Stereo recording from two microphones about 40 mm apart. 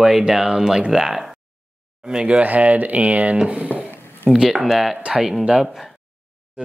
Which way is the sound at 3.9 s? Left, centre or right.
Left.